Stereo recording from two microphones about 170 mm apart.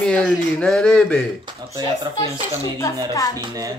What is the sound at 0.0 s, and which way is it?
Speech, 5° left (ahead or behind).